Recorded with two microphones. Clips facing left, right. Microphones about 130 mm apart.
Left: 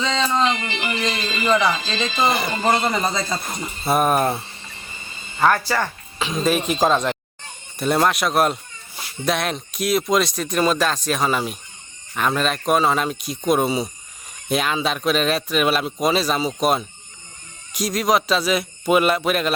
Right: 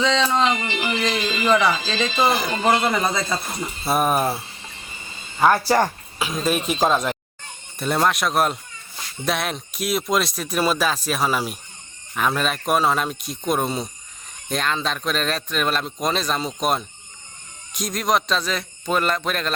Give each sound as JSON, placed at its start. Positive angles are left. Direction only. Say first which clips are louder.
{"t": 0.3, "sound": "a sound", "louder": "even", "side_deg": -10}
{"t": 1.0, "sound": "speech", "louder": "right 1 dB", "side_deg": -5}
{"t": 5.6, "sound": "speech", "louder": "right 4 dB", "side_deg": -40}
{"t": 6.1, "sound": "speech", "louder": "left 2 dB", "side_deg": -5}